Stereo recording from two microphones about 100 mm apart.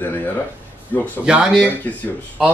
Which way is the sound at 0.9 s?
15° left (ahead or behind).